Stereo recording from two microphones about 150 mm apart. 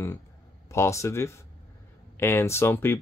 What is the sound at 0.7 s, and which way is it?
Speech, 20° left (ahead or behind).